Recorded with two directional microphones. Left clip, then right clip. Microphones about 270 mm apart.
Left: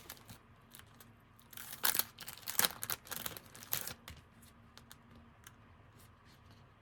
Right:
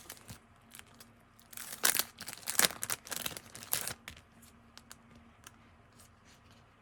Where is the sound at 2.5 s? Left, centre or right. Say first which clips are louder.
Right 5 dB; centre.